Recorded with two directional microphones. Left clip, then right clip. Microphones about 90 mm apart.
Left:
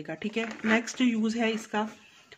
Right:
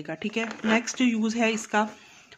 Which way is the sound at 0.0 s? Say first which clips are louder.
Right 2 dB; 25° right (ahead or behind).